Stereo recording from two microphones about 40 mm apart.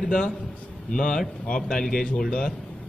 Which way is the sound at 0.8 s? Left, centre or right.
Centre.